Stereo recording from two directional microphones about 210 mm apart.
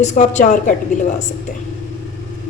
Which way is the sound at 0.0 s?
35° left (ahead or behind).